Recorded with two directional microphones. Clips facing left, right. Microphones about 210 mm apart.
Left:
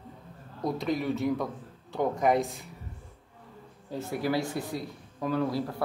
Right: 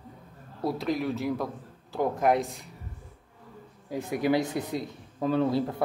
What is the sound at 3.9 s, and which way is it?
Speech, 15° right (ahead or behind).